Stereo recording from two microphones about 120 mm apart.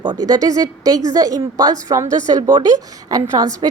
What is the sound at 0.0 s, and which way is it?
A woman's voice, 35° right (ahead or behind).